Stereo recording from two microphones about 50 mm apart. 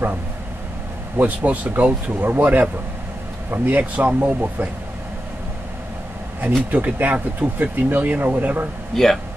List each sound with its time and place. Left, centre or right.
1.1 s speech: right
2.1 s speech: right
6.7 s speech: right
8.9 s speech: centre